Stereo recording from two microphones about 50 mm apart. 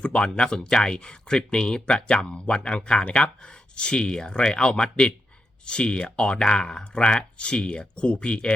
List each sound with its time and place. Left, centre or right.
0.0 s speech: left